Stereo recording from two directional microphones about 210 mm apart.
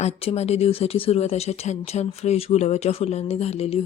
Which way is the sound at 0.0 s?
30° left (ahead or behind).